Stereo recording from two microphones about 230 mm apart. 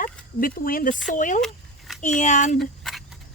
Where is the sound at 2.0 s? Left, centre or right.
Left.